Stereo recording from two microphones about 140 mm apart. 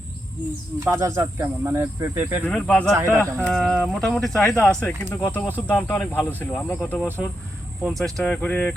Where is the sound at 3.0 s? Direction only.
20° right (ahead or behind).